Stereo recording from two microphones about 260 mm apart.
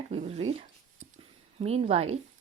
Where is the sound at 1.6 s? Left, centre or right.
Right.